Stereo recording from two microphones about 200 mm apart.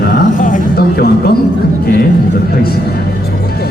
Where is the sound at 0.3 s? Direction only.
40° left (ahead or behind).